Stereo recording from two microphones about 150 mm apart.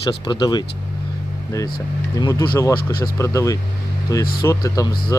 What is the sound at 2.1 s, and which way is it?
Speech, 25° left (ahead or behind).